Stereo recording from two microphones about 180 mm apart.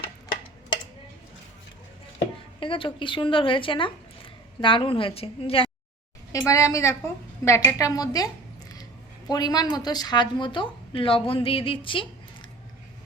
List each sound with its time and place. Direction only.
2.6 s a woman's voice: 30° left (ahead or behind)
6.3 s a woman's voice: 15° left (ahead or behind)